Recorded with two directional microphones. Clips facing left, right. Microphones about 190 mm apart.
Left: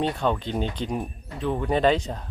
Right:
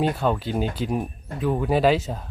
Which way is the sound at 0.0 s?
5° right (ahead or behind).